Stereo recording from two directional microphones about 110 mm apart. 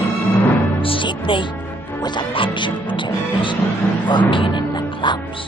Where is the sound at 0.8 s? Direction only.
50° left (ahead or behind).